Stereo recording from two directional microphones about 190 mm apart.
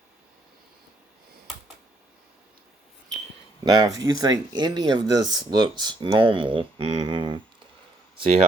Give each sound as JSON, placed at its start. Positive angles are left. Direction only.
{"t": 3.6, "sound": "speech", "side_deg": -20}